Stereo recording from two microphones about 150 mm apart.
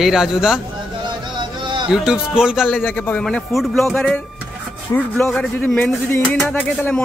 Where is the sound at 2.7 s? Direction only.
10° left (ahead or behind).